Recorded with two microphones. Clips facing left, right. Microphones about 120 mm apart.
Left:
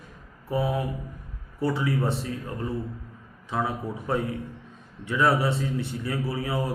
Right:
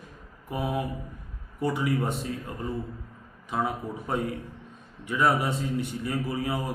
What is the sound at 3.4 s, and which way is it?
Speech, 15° right (ahead or behind).